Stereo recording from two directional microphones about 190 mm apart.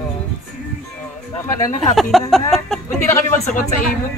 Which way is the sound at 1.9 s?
Centre (ahead or behind).